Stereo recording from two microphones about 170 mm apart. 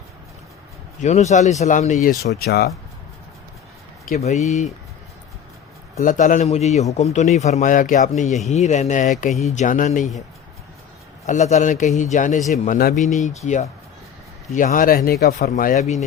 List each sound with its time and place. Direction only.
1.0 s a man's voice: 40° left (ahead or behind)
2.0 s speech: 65° left (ahead or behind)
4.2 s a man's voice: 40° left (ahead or behind)
6.0 s a man's voice: 50° left (ahead or behind)
11.3 s a man's voice: 45° left (ahead or behind)
14.5 s speech: 55° left (ahead or behind)
15.4 s a man's voice: 55° left (ahead or behind)